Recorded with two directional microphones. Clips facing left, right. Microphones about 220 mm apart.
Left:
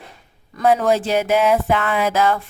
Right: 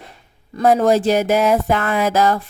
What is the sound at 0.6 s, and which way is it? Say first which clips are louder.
Speech: right 3 dB; 40° right (ahead or behind).